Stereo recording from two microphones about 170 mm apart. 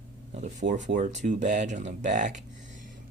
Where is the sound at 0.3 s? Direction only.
45° right (ahead or behind).